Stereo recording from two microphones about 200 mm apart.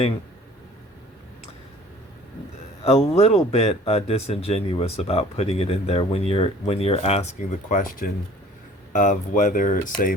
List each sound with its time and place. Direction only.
2.8 s speech: 30° left (ahead or behind)